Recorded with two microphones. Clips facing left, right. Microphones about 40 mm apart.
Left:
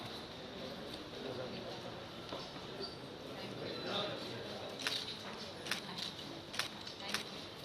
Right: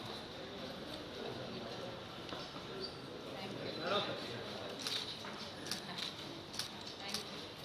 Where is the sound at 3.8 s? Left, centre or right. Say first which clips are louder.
Right 4 dB; right.